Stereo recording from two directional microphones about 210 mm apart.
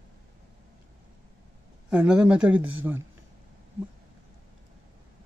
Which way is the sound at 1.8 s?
5° right (ahead or behind).